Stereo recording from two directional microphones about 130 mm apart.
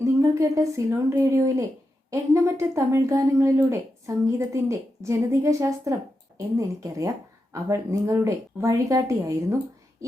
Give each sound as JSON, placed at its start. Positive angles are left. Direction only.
{"t": 0.0, "sound": "a woman's voice", "side_deg": -25}